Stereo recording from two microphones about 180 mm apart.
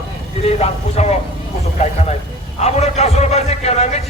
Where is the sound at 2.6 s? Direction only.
35° left (ahead or behind).